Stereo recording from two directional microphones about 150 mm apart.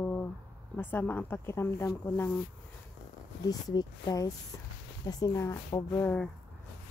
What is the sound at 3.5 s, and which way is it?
A woman's voice, 25° left (ahead or behind).